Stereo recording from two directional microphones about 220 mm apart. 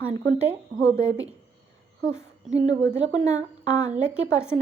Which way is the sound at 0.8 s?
15° left (ahead or behind).